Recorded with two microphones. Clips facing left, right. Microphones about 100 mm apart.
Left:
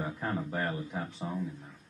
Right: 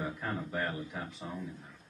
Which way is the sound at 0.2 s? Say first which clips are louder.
Left 3 dB; 5° left (ahead or behind).